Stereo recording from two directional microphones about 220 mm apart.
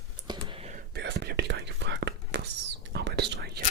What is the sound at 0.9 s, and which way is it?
Whispering, 45° right (ahead or behind).